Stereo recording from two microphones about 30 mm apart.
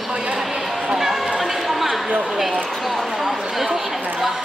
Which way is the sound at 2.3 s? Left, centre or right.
Centre.